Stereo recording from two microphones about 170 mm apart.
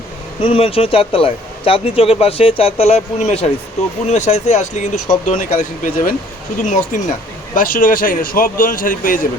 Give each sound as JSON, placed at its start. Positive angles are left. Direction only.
{"t": 0.4, "sound": "speech", "side_deg": 35}